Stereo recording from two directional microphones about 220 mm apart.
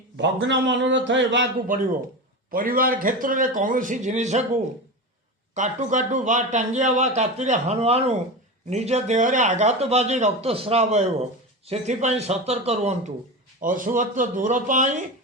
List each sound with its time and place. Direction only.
0.2 s a man's voice: 55° right (ahead or behind)
2.5 s a man's voice: 40° right (ahead or behind)
5.5 s a man's voice: 35° right (ahead or behind)